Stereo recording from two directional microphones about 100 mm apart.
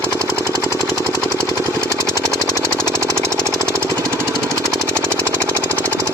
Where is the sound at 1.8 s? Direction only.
30° right (ahead or behind).